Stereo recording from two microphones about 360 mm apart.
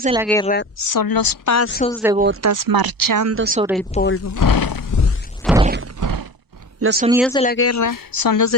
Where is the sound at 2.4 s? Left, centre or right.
Right.